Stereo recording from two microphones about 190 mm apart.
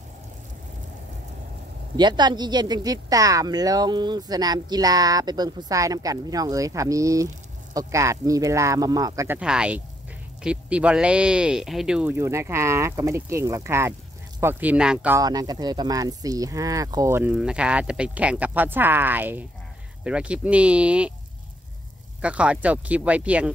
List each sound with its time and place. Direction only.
2.0 s a woman's voice: 20° right (ahead or behind)
9.4 s speech: 5° right (ahead or behind)
15.1 s speech: 20° right (ahead or behind)
22.2 s speech: 5° right (ahead or behind)